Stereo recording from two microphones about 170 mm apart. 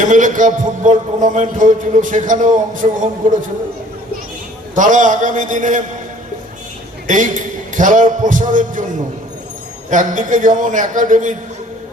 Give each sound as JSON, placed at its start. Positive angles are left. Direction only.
{"t": 0.0, "sound": "music", "side_deg": -50}
{"t": 4.7, "sound": "music", "side_deg": -50}
{"t": 7.1, "sound": "music", "side_deg": -50}
{"t": 9.9, "sound": "music", "side_deg": -50}